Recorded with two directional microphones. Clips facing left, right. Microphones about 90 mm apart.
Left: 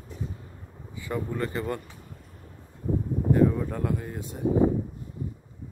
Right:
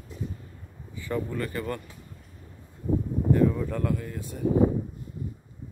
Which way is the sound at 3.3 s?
15° left (ahead or behind).